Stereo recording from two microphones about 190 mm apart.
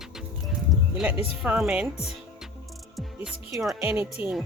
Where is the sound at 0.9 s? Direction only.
5° right (ahead or behind).